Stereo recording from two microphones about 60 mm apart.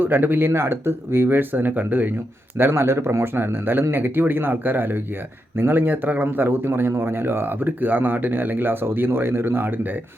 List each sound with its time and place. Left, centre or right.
0.0 s a man's voice: right
2.6 s a man's voice: right